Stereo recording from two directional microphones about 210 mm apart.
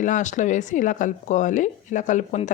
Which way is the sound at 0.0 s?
35° left (ahead or behind).